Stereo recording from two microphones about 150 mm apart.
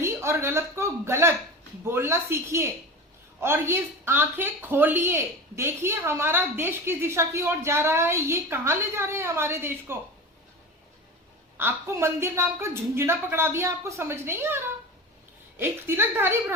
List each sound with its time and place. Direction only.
0.0 s speech: 15° right (ahead or behind)
11.5 s speech: 15° right (ahead or behind)